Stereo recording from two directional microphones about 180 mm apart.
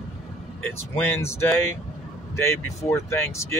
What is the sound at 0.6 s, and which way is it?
Speech, 10° left (ahead or behind).